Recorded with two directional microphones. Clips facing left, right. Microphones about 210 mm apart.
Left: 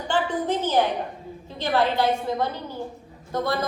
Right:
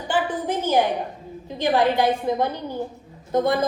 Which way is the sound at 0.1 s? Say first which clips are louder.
Even; 10° right (ahead or behind).